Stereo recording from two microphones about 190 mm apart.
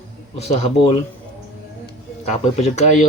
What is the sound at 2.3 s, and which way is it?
Speech, 35° left (ahead or behind).